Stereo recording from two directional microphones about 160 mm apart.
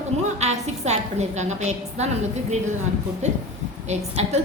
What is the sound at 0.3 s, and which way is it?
A woman's voice, 45° right (ahead or behind).